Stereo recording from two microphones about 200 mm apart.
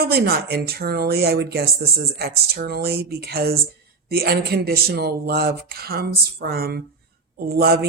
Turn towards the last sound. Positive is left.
turn(degrees=-50)  # may be behind; listen again after turning